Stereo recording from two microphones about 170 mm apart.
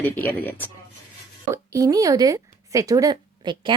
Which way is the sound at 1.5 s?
20° right (ahead or behind).